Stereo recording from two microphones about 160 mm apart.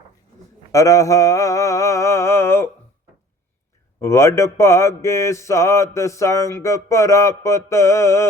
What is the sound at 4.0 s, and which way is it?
Speech, 15° left (ahead or behind).